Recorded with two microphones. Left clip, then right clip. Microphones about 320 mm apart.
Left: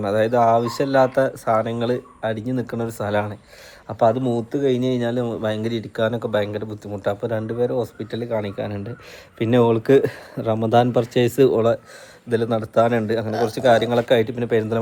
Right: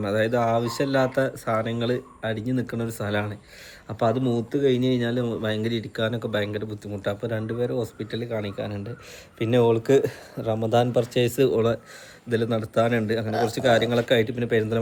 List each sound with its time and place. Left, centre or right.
0.0 s speech: centre
12.3 s speech: centre